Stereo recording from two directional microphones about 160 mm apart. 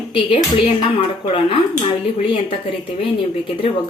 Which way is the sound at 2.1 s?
35° left (ahead or behind).